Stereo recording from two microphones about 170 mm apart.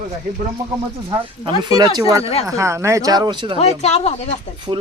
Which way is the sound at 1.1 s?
30° right (ahead or behind).